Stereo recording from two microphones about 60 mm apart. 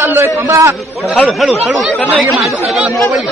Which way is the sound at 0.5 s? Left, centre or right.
Right.